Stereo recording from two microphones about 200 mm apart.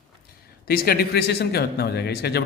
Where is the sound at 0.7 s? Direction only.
50° left (ahead or behind).